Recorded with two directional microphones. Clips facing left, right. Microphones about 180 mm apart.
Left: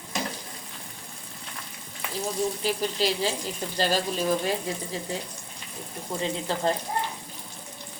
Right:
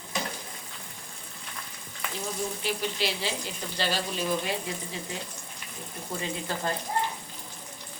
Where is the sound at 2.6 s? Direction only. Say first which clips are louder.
Left 2 dB; 40° left (ahead or behind).